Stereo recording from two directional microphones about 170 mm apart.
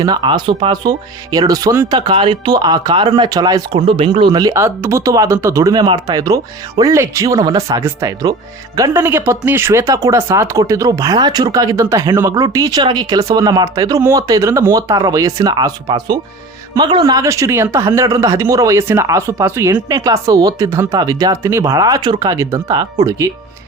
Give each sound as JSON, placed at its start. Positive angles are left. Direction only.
{"t": 0.0, "sound": "speech", "side_deg": -25}
{"t": 2.0, "sound": "speech", "side_deg": -30}
{"t": 3.8, "sound": "speech", "side_deg": -35}